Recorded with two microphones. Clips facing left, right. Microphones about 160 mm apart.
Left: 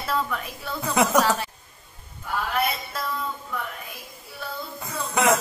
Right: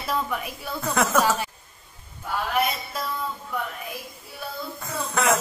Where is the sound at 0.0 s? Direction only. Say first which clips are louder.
Even; 10° right (ahead or behind).